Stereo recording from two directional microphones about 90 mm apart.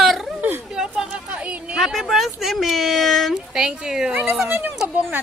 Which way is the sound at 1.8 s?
5° right (ahead or behind).